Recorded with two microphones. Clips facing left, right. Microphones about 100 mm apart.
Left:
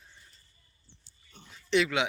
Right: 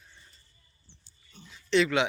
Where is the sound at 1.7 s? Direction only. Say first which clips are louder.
Right 2 dB; 20° left (ahead or behind).